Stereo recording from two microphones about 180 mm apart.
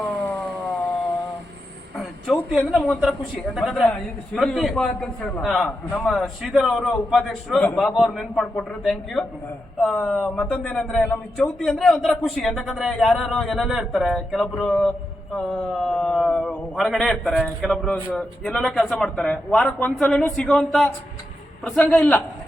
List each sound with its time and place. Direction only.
2.5 s a man's voice: centre (ahead or behind)